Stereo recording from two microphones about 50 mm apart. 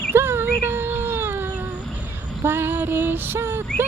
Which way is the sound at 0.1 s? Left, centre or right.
Right.